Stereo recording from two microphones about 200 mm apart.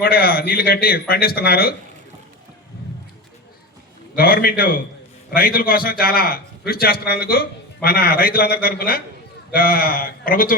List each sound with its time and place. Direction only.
0.0 s a man's voice: 50° left (ahead or behind)
4.1 s a man's voice: 45° left (ahead or behind)